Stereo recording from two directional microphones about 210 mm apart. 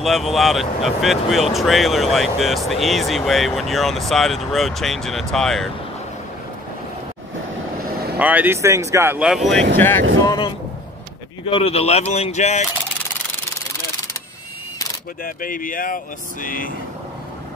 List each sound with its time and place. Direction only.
0.0 s speech: centre (ahead or behind)
8.2 s speech: 10° right (ahead or behind); by 10.0 s 10° left (ahead or behind)
10.2 s a sound: 20° left (ahead or behind)
11.4 s speech: 25° left (ahead or behind)
15.2 s speech: 40° left (ahead or behind)